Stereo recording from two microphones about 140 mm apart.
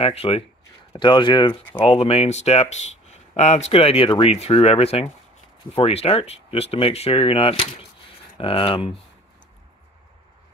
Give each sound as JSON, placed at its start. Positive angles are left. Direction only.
{"t": 0.0, "sound": "speech", "side_deg": 45}